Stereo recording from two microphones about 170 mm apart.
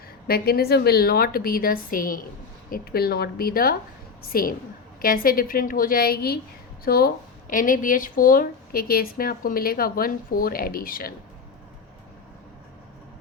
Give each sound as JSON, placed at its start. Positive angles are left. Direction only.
{"t": 0.3, "sound": "speech", "side_deg": 65}